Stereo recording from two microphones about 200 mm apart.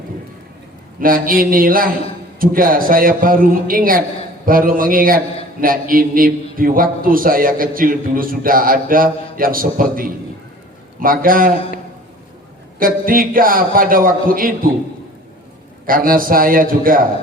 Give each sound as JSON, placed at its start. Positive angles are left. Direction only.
{"t": 0.9, "sound": "a man's voice", "side_deg": -45}
{"t": 12.8, "sound": "a man's voice", "side_deg": -45}
{"t": 15.9, "sound": "a man's voice", "side_deg": -45}